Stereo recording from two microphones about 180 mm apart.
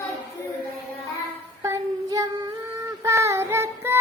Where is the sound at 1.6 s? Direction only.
15° right (ahead or behind).